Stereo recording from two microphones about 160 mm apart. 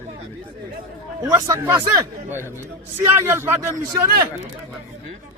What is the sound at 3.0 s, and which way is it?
A man's voice, 15° right (ahead or behind).